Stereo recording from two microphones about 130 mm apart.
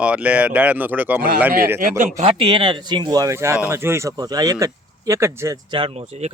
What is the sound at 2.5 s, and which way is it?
Speech, 40° right (ahead or behind).